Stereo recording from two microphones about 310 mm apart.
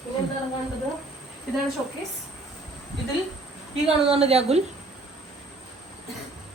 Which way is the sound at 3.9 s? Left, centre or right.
Centre.